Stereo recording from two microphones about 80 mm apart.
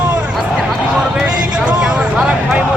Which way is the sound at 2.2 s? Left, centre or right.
Centre.